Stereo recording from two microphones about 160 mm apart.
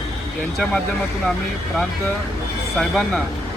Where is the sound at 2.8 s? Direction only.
5° left (ahead or behind).